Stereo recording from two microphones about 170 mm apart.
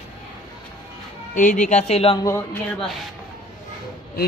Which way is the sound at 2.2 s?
15° left (ahead or behind).